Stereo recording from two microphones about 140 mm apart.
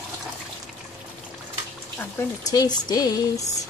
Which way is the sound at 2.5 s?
30° left (ahead or behind).